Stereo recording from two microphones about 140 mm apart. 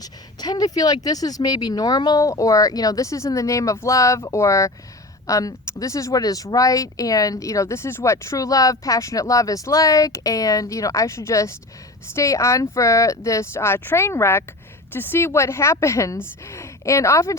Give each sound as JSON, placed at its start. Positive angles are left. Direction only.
{"t": 0.4, "sound": "speech", "side_deg": 30}